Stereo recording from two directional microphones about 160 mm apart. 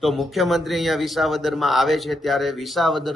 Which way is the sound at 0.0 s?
Centre (ahead or behind).